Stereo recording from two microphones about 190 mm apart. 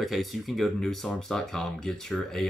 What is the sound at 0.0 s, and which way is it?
Speech, centre (ahead or behind).